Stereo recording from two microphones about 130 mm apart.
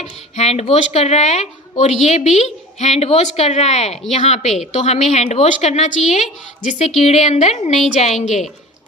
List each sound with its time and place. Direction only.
0.4 s a woman's voice: 55° left (ahead or behind)